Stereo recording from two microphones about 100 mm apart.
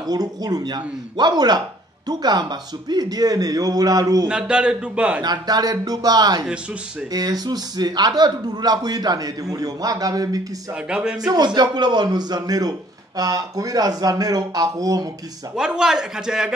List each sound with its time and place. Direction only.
0.0 s a man's voice: 40° right (ahead or behind)
4.3 s speech: 10° right (ahead or behind)
5.2 s a man's voice: 40° right (ahead or behind)
10.9 s speech: 10° right (ahead or behind)
11.2 s a man's voice: 45° right (ahead or behind)
15.5 s speech: 5° right (ahead or behind)